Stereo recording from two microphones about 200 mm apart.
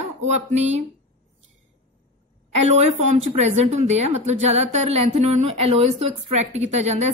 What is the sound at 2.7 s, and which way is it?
A woman's voice, 35° right (ahead or behind).